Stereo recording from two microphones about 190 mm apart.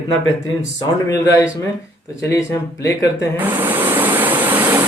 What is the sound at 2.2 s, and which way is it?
Speech, 15° left (ahead or behind).